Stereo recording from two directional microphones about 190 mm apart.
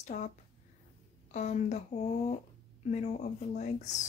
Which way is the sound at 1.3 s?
40° left (ahead or behind).